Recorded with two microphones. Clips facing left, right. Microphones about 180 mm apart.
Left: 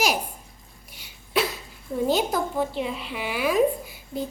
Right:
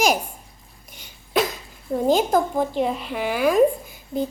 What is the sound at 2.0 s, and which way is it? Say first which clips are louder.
A child's voice: right 6 dB; 45° right (ahead or behind).